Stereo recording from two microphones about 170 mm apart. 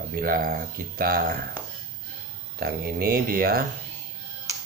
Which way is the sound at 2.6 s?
60° right (ahead or behind).